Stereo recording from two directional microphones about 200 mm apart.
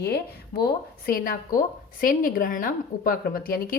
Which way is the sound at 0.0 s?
50° left (ahead or behind).